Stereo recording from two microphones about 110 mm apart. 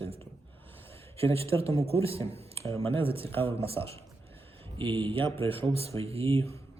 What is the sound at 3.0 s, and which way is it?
Speech, 60° right (ahead or behind).